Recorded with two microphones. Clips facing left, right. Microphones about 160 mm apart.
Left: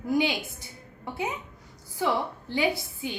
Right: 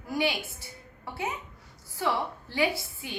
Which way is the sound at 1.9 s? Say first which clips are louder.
Left 2 dB; 20° left (ahead or behind).